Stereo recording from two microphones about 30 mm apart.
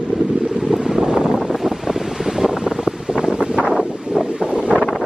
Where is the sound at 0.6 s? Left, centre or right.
Centre.